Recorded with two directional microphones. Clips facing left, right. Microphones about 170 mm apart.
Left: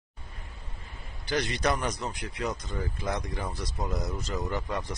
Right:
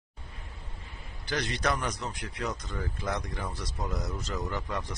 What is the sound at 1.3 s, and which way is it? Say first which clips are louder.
Speech: left 2 dB; 10° left (ahead or behind).